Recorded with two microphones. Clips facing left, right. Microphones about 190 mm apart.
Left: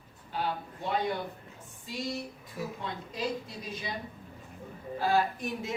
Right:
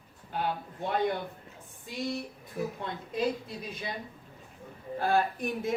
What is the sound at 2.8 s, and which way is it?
A woman's voice, 55° right (ahead or behind).